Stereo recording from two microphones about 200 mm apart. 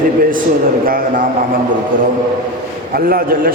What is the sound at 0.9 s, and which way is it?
Speech, 45° right (ahead or behind).